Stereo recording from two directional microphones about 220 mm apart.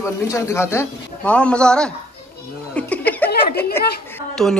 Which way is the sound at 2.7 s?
5° left (ahead or behind).